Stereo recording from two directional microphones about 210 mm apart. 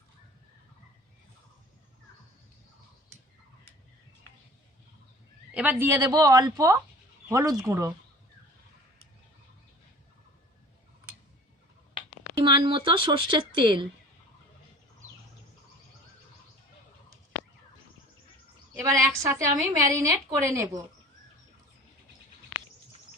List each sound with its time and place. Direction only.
5.5 s a woman's voice: 10° right (ahead or behind)
12.5 s speech: 20° right (ahead or behind)
18.7 s a woman's voice: 15° right (ahead or behind)